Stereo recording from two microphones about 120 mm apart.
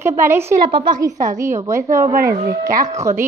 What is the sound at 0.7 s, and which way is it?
Speech, 45° right (ahead or behind).